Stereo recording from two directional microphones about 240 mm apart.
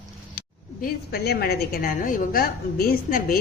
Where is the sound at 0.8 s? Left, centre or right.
Left.